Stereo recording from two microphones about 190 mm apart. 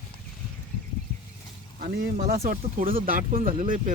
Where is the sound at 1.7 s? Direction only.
45° right (ahead or behind).